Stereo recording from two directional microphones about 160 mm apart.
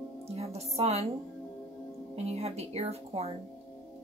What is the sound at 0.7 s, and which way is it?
Speech, 40° right (ahead or behind).